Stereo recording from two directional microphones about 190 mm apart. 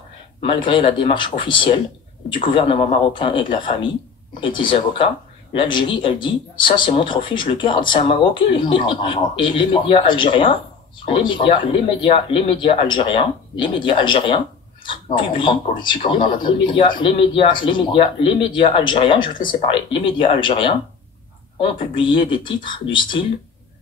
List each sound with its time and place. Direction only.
0.4 s a man's voice: 25° left (ahead or behind)